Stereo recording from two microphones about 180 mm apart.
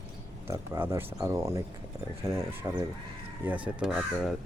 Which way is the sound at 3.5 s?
5° right (ahead or behind).